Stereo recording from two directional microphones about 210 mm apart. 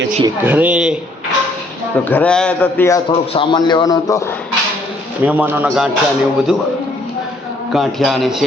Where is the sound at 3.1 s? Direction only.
25° left (ahead or behind).